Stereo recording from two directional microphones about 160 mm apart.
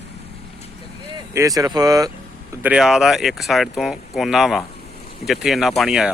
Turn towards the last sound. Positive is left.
turn(degrees=0)  # may be behind; listen again after turning